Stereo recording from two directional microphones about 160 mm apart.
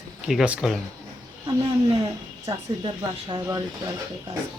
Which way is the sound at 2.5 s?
30° right (ahead or behind).